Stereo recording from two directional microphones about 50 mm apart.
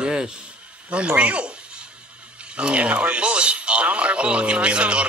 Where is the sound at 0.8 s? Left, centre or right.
Right.